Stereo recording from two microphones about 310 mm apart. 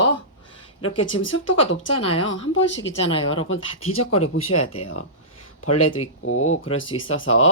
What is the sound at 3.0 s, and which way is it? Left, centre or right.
Speech, centre.